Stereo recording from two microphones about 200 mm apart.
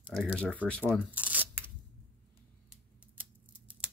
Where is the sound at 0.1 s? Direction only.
5° left (ahead or behind).